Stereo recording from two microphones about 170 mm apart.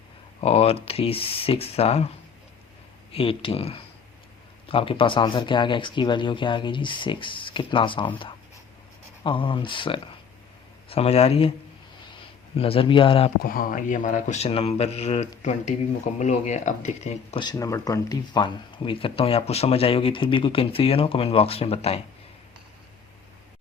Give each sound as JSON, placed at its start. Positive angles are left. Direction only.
{"t": 0.4, "sound": "speech", "side_deg": 35}
{"t": 3.1, "sound": "speech", "side_deg": 30}
{"t": 12.5, "sound": "speech", "side_deg": 35}
{"t": 13.4, "sound": "speech", "side_deg": 60}
{"t": 17.4, "sound": "speech", "side_deg": 20}